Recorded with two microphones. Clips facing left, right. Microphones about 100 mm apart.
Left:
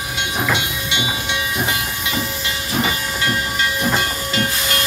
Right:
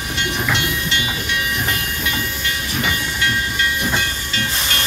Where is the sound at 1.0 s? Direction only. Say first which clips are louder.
Even; 20° left (ahead or behind).